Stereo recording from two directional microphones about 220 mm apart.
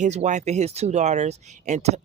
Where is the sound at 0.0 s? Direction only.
30° right (ahead or behind).